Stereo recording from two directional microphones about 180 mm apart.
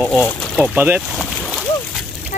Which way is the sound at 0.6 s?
10° right (ahead or behind).